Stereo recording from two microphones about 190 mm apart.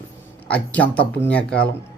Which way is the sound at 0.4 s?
5° left (ahead or behind).